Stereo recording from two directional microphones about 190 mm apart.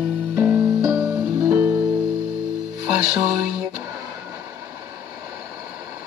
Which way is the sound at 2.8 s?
10° right (ahead or behind).